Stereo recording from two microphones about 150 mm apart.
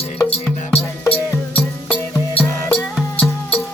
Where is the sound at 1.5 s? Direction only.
10° left (ahead or behind).